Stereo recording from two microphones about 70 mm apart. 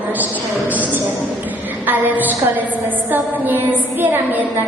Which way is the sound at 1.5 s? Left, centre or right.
Right.